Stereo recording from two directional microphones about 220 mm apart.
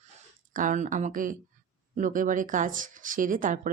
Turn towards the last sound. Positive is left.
turn(degrees=-35)  # may be behind; listen again after turning